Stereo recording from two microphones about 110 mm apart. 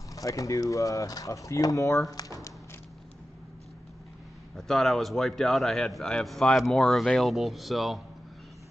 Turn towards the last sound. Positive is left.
turn(degrees=0)  # may be behind; listen again after turning